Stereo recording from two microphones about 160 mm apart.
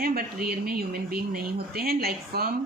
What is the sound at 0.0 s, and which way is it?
A woman's voice, 70° right (ahead or behind).